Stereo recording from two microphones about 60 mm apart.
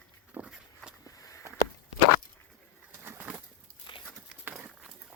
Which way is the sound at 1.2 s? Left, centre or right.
Left.